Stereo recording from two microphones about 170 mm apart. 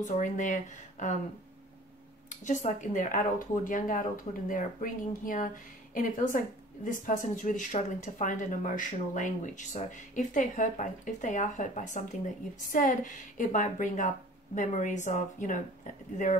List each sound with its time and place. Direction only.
0.0 s a woman's voice: 50° left (ahead or behind)
2.2 s a woman's voice: 45° left (ahead or behind)